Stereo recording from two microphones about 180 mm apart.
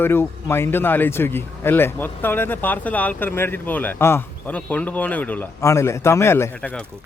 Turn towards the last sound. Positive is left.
turn(degrees=15)  # may be behind; listen again after turning